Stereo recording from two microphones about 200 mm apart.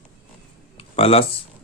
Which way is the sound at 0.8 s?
30° left (ahead or behind).